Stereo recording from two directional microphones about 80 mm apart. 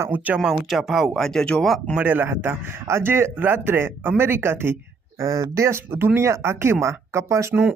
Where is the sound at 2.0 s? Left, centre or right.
Right.